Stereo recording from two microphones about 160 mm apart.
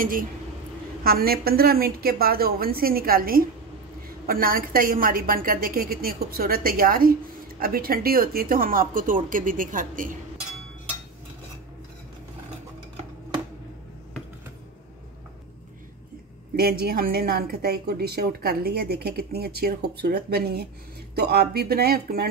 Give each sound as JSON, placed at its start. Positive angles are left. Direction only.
{"t": 0.0, "sound": "a woman's voice", "side_deg": -60}
{"t": 1.0, "sound": "a woman's voice", "side_deg": -70}
{"t": 16.5, "sound": "a woman's voice", "side_deg": -75}